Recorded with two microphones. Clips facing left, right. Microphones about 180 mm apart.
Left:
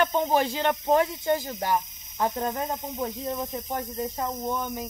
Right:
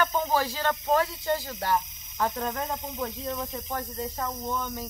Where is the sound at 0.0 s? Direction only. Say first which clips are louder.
Left 3 dB; 25° left (ahead or behind).